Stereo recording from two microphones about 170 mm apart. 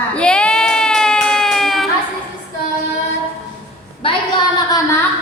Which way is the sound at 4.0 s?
30° left (ahead or behind).